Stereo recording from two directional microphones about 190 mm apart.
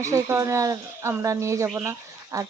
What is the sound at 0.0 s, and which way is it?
Speech, 15° right (ahead or behind).